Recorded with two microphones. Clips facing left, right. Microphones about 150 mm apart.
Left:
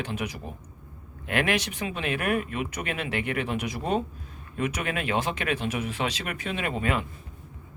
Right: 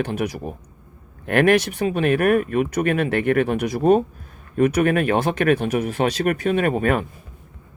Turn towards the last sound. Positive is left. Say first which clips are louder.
# right 9 dB
turn(degrees=-50)  # may be behind; listen again after turning